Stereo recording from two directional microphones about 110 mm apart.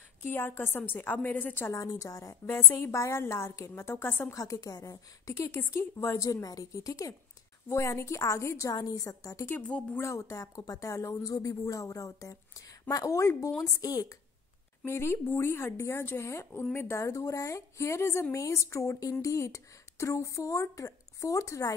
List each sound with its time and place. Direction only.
0.2 s a woman's voice: 20° left (ahead or behind)
1.8 s a woman's voice: 35° left (ahead or behind)
9.6 s speech: 10° left (ahead or behind)
9.9 s a woman's voice: 25° left (ahead or behind)
14.9 s a woman's voice: 25° left (ahead or behind)